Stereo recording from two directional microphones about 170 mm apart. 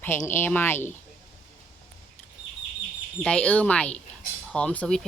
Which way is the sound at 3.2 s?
5° left (ahead or behind).